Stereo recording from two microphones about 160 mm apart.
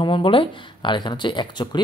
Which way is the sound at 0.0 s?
30° left (ahead or behind).